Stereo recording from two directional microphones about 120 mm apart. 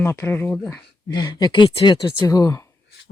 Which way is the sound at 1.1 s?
35° left (ahead or behind).